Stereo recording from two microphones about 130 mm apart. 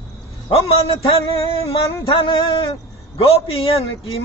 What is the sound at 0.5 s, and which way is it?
Speech, 50° left (ahead or behind).